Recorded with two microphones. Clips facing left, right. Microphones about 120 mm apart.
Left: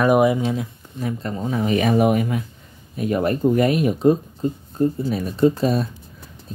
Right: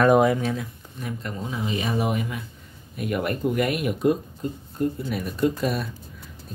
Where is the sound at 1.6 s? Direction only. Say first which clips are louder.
Left 8 dB; 60° left (ahead or behind).